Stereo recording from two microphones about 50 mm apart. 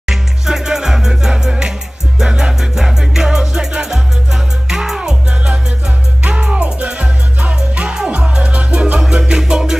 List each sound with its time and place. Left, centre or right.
0.0 s music: centre; by 9.0 s right
9.2 s music: centre